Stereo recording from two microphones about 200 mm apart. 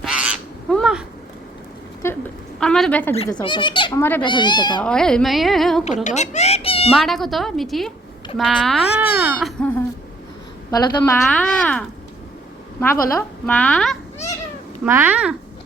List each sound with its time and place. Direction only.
0.0 s goose: 5° right (ahead or behind)
2.0 s a woman's voice: 15° left (ahead or behind)
2.6 s a woman's voice: 5° left (ahead or behind)
3.4 s speech: 25° left (ahead or behind)
4.8 s a woman's voice: 5° left (ahead or behind)
5.8 s speech: 35° left (ahead or behind)
6.9 s a woman's voice: centre (ahead or behind)
10.7 s speech: 20° left (ahead or behind)
11.2 s a woman's voice: 5° left (ahead or behind)
14.8 s a child's voice: 10° right (ahead or behind)